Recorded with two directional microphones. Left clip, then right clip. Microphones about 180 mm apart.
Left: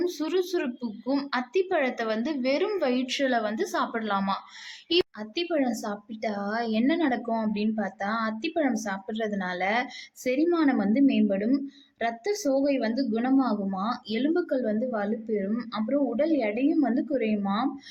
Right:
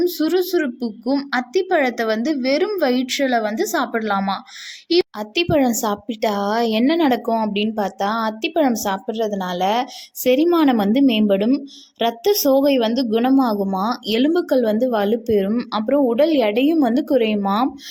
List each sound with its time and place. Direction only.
0.0 s a woman's voice: 30° right (ahead or behind)
5.3 s a woman's voice: 40° right (ahead or behind)
9.0 s a woman's voice: 30° right (ahead or behind)
10.2 s a woman's voice: 45° right (ahead or behind)